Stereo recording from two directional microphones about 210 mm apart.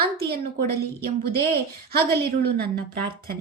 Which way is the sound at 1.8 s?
50° right (ahead or behind).